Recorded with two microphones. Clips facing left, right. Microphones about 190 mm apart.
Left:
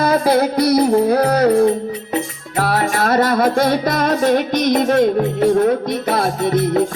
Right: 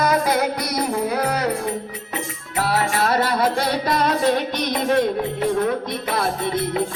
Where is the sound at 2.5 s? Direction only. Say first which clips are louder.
Left 3 dB; 45° left (ahead or behind).